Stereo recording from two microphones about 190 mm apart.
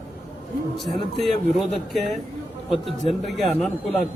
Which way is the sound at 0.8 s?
Centre (ahead or behind).